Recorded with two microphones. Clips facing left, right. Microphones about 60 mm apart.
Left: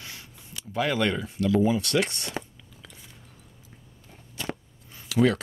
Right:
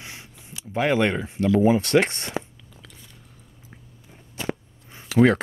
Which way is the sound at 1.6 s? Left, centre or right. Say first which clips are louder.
Right 7 dB; right.